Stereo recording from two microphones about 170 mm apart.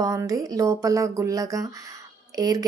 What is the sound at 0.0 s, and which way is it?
Speech, 20° right (ahead or behind).